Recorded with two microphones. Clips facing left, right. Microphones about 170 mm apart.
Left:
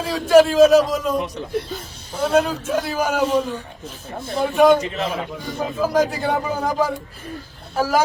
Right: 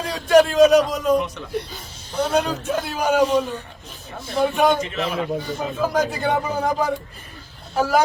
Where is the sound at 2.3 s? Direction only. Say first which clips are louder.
Left 4 dB; centre (ahead or behind).